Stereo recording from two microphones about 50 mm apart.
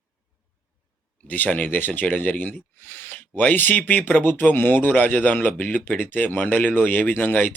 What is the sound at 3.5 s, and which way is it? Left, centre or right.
Speech, left.